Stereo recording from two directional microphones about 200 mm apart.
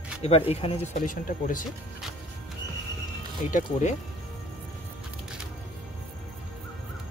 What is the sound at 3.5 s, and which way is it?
Speech, 40° left (ahead or behind).